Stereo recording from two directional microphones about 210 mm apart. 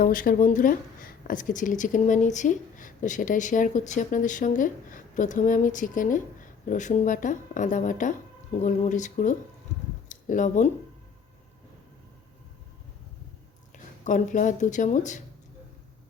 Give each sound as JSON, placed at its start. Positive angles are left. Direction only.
{"t": 0.0, "sound": "speech", "side_deg": 40}
{"t": 13.7, "sound": "speech", "side_deg": 35}